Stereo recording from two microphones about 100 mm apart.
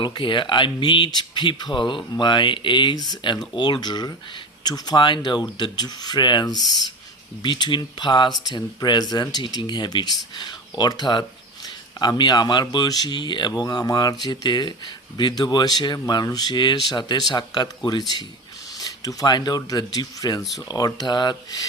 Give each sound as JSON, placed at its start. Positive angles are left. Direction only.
{"t": 0.0, "sound": "speech", "side_deg": 55}